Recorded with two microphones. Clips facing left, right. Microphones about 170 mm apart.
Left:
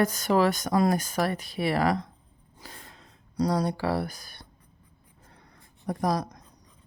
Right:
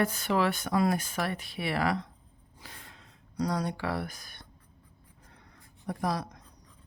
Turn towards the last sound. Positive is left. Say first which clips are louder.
# left 4 dB
turn(degrees=40)  # may be behind; listen again after turning